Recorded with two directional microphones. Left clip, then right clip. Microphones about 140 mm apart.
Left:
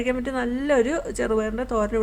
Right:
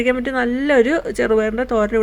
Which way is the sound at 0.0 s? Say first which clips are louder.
Right 7 dB; 30° right (ahead or behind).